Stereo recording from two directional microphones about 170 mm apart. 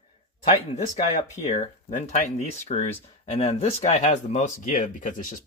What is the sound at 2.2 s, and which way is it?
Speech, 40° left (ahead or behind).